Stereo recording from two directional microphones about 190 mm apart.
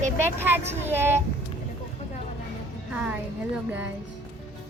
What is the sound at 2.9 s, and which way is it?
Speech, 5° right (ahead or behind).